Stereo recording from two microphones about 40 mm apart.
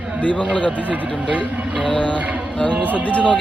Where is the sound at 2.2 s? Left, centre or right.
Right.